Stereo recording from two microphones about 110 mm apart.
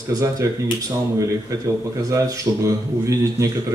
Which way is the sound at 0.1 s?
30° right (ahead or behind).